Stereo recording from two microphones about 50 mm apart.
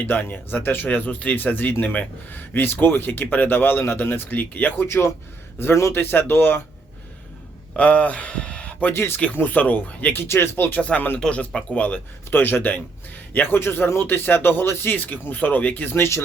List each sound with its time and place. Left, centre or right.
0.0 s a man's voice: left
0.9 s a man's voice: left
4.8 s a man's voice: left
5.9 s speech: left
7.8 s speech: left
8.9 s speech: left
9.3 s a man's voice: left
10.2 s speech: left
10.8 s speech: left
11.7 s a man's voice: left
16.0 s a man's voice: left